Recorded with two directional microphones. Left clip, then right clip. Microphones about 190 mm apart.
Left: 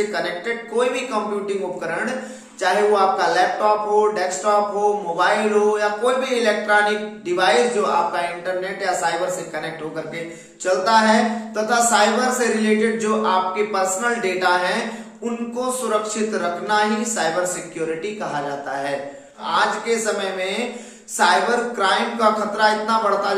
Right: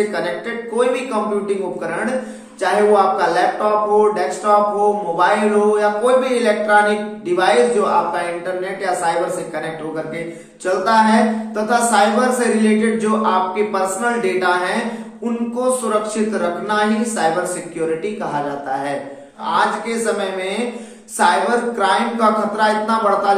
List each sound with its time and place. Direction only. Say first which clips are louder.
0.7 s speech: right 3 dB; 25° left (ahead or behind)
2.6 s speech: right 3 dB; 25° left (ahead or behind)
10.6 s speech: right 2 dB; 25° left (ahead or behind)
15.6 s speech: right 4 dB; 20° left (ahead or behind)